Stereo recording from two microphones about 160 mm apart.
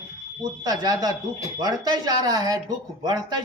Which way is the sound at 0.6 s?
25° right (ahead or behind).